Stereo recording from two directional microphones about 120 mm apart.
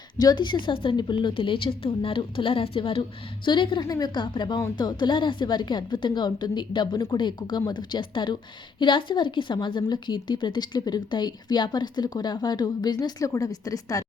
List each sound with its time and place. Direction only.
0.2 s a woman's voice: 35° left (ahead or behind)